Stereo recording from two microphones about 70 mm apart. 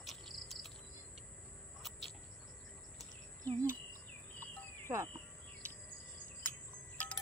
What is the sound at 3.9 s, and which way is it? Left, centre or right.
Bird vocalization, left.